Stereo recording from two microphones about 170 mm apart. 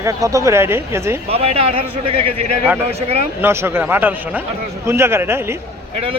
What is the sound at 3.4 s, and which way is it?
Speech, 15° right (ahead or behind).